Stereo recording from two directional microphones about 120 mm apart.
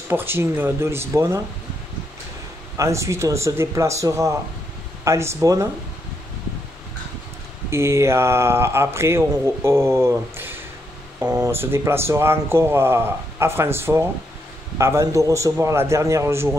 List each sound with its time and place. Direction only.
0.1 s speech: 20° right (ahead or behind)
2.8 s speech: 25° right (ahead or behind)
7.7 s speech: 25° right (ahead or behind)